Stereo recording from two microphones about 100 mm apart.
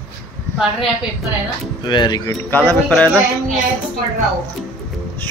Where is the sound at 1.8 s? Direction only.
50° left (ahead or behind).